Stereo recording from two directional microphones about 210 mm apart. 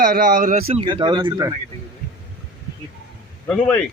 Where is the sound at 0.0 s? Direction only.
40° right (ahead or behind); by 1.5 s 20° right (ahead or behind).